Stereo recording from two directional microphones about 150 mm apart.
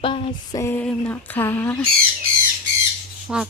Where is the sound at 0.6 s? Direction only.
15° left (ahead or behind).